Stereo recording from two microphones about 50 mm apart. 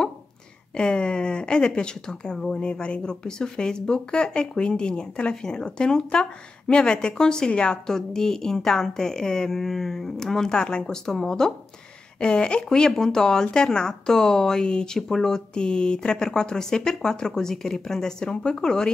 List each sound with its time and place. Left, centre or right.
0.7 s speech: centre